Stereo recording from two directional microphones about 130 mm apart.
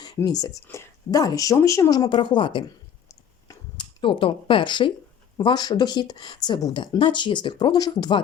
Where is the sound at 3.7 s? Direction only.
40° left (ahead or behind).